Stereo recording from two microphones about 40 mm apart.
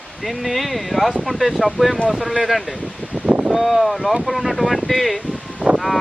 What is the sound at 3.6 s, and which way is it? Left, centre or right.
Speech, centre.